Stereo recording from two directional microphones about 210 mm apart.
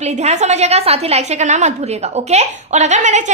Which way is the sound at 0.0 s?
35° right (ahead or behind).